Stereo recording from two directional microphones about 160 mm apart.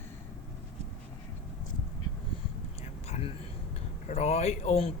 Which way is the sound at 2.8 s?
40° left (ahead or behind).